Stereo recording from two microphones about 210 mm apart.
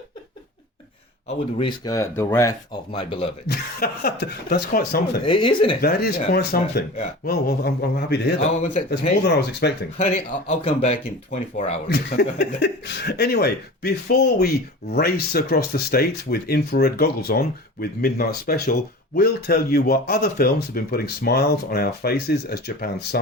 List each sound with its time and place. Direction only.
1.3 s speech: 25° left (ahead or behind)
2.9 s speech: 25° left (ahead or behind)
3.4 s speech: 50° left (ahead or behind)
5.2 s speech: 25° left (ahead or behind)
5.8 s speech: 50° left (ahead or behind)
10.6 s speech: 30° left (ahead or behind)
11.9 s speech: 50° left (ahead or behind)